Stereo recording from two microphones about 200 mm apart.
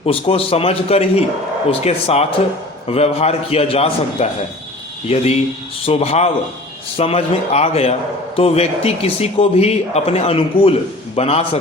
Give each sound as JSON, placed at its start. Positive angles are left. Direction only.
{"t": 0.0, "sound": "a man's voice", "side_deg": 30}